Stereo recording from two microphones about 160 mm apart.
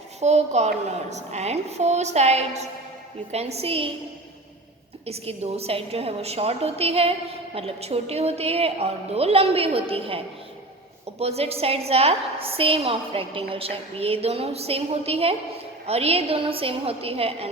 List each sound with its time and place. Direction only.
0.2 s a woman's voice: 45° right (ahead or behind)
5.0 s a woman's voice: 40° right (ahead or behind)
11.2 s a woman's voice: 40° right (ahead or behind)